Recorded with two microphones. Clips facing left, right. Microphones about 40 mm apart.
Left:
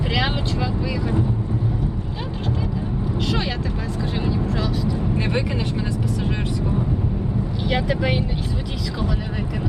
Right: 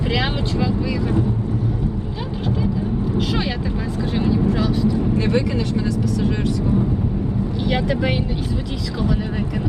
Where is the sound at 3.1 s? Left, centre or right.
Centre.